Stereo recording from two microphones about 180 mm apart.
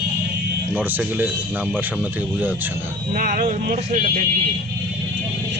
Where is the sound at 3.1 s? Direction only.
45° right (ahead or behind).